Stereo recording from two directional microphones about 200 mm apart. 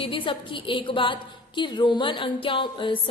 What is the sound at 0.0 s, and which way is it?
A woman's voice, 25° left (ahead or behind).